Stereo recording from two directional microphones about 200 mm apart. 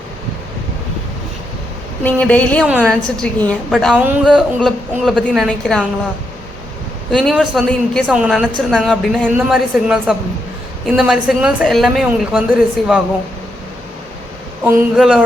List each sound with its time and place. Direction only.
2.0 s a woman's voice: 5° left (ahead or behind)
7.1 s a woman's voice: centre (ahead or behind)
14.6 s a woman's voice: 5° right (ahead or behind)